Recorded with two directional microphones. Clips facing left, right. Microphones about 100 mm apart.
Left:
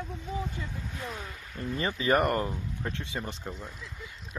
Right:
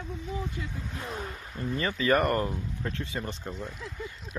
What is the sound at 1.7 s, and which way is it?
Speech, 25° left (ahead or behind).